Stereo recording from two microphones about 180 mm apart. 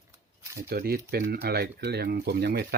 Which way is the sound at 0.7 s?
55° right (ahead or behind).